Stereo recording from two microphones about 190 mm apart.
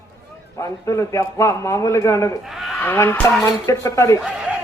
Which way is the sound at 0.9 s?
15° left (ahead or behind).